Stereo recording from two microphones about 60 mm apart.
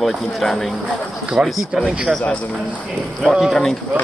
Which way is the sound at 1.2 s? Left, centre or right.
Centre.